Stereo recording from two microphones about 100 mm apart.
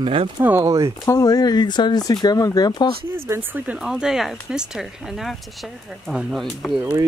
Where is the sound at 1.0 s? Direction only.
35° left (ahead or behind).